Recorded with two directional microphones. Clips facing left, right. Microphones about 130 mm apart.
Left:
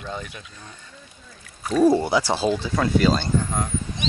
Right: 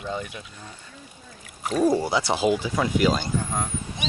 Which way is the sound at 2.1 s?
20° right (ahead or behind).